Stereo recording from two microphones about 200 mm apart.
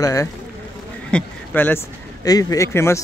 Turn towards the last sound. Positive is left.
turn(degrees=15)  # may be behind; listen again after turning